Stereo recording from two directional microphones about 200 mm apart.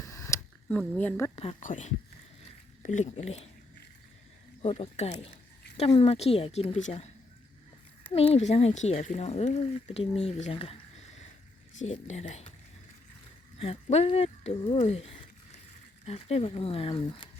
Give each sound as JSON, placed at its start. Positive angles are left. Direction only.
{"t": 0.0, "sound": "a sound", "side_deg": 15}
{"t": 1.4, "sound": "speech", "side_deg": 35}
{"t": 4.6, "sound": "speech", "side_deg": 30}
{"t": 11.8, "sound": "speech", "side_deg": 35}
{"t": 13.6, "sound": "speech", "side_deg": 30}